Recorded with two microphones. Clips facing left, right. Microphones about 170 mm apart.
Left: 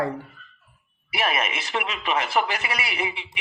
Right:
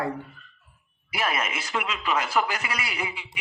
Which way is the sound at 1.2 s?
20° left (ahead or behind).